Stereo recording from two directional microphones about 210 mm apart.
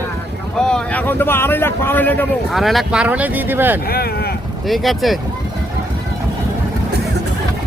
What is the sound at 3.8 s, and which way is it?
Speech, 45° left (ahead or behind).